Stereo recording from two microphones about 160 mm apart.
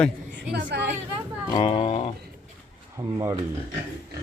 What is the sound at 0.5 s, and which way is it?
Speech, 90° right.